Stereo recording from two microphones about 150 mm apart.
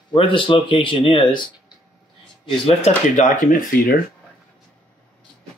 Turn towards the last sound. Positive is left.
turn(degrees=65)  # may be behind; listen again after turning